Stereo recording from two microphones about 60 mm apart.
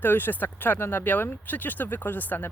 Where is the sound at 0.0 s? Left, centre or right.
Left.